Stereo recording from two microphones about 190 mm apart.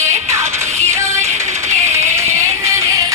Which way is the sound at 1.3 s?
40° right (ahead or behind).